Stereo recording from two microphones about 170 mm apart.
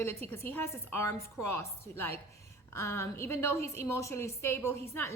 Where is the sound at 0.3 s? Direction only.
10° left (ahead or behind).